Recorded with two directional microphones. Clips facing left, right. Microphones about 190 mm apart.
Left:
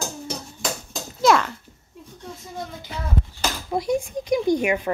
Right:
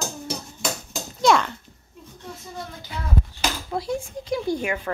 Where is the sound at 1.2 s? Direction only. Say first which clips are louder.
Left 1 dB; centre (ahead or behind).